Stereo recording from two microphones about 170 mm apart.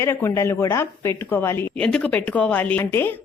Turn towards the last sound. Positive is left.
turn(degrees=15)  # may be behind; listen again after turning